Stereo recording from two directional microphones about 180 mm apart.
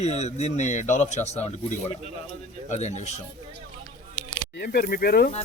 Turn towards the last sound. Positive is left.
turn(degrees=60)  # may be behind; listen again after turning